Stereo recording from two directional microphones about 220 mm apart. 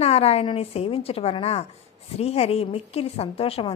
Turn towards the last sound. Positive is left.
turn(degrees=25)  # may be behind; listen again after turning